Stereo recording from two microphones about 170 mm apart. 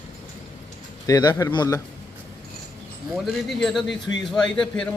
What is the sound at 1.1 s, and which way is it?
Speech, 20° left (ahead or behind).